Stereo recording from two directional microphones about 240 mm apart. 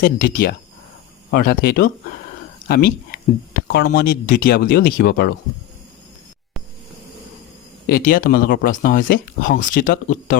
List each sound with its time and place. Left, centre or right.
0.0 s speech: left
7.9 s speech: left